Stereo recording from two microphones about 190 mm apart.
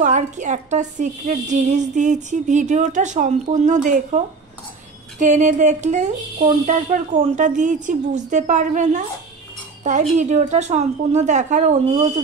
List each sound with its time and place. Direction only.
0.0 s a woman's voice: 40° right (ahead or behind)
5.2 s a woman's voice: 40° right (ahead or behind)